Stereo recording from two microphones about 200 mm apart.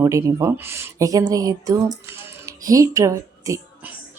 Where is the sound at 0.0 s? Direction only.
15° right (ahead or behind).